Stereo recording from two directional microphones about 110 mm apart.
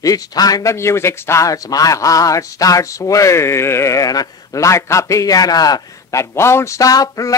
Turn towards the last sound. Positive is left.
turn(degrees=35)  # may be behind; listen again after turning